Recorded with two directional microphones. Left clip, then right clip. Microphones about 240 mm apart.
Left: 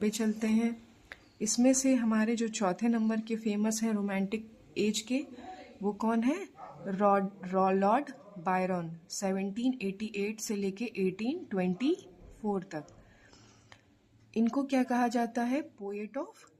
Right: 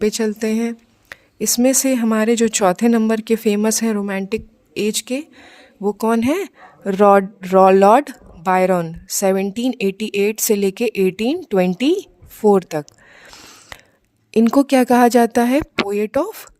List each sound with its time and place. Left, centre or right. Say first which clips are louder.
0.0 s speech: right 14 dB; right